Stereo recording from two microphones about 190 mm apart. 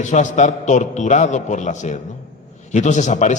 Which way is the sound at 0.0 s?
40° left (ahead or behind).